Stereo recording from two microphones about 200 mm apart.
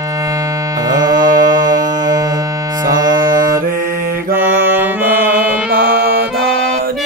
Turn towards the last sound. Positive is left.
turn(degrees=-50)  # may be behind; listen again after turning